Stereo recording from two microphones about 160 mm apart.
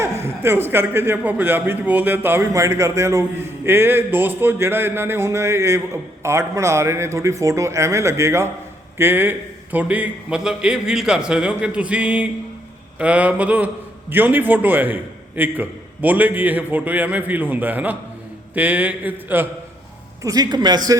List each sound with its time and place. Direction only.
0.0 s a man's voice: 15° right (ahead or behind)
20.2 s a man's voice: 25° right (ahead or behind)